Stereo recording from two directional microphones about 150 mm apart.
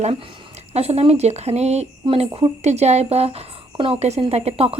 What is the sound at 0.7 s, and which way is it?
A woman's voice, 45° right (ahead or behind).